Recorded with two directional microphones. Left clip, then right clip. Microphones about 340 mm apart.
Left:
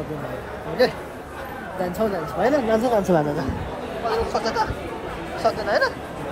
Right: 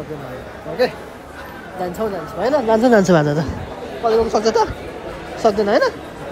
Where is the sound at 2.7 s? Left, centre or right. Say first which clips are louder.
Right 6 dB; right.